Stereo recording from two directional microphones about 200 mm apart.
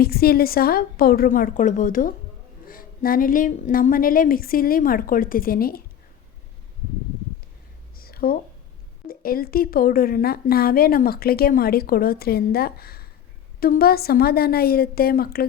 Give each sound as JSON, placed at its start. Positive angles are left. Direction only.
{"t": 0.0, "sound": "a woman's voice", "side_deg": 50}
{"t": 7.9, "sound": "a sound", "side_deg": 50}
{"t": 9.0, "sound": "a woman's voice", "side_deg": 45}